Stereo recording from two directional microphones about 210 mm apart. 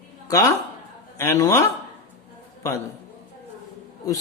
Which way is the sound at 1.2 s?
15° left (ahead or behind).